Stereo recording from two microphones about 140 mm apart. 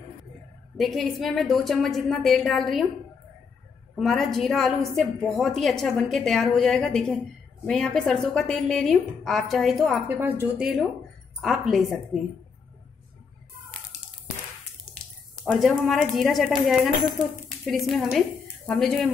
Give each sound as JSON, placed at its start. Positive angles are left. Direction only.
{"t": 0.7, "sound": "a woman's voice", "side_deg": 0}
{"t": 3.9, "sound": "a woman's voice", "side_deg": 0}
{"t": 10.0, "sound": "a woman's voice", "side_deg": -15}
{"t": 15.4, "sound": "a woman's voice", "side_deg": 0}